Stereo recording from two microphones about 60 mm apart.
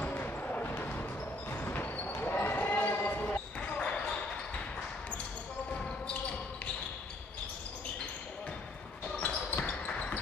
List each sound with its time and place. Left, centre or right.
0.0 s a sound: left
2.1 s basketball bounce: left
3.7 s basketball bounce: centre
9.1 s basketball bounce: left